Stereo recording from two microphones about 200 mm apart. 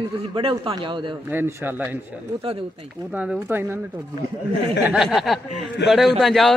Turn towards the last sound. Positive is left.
turn(degrees=0)  # may be behind; listen again after turning